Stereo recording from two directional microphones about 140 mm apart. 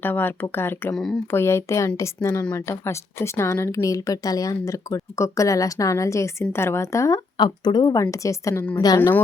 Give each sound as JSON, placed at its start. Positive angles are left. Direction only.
{"t": 0.0, "sound": "a woman's voice", "side_deg": 15}
{"t": 7.3, "sound": "a woman's voice", "side_deg": 30}